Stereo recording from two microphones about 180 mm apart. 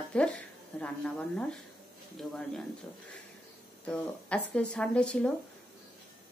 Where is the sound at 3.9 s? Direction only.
5° left (ahead or behind).